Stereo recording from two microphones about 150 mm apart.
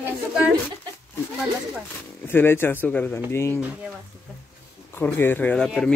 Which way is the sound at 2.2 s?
15° left (ahead or behind).